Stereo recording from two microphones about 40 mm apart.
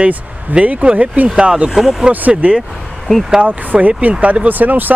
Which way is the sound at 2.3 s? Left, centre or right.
Right.